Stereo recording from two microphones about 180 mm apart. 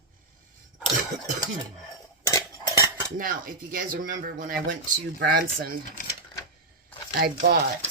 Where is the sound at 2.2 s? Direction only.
20° left (ahead or behind).